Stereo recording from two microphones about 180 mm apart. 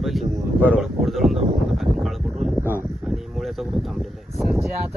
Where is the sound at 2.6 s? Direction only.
15° right (ahead or behind).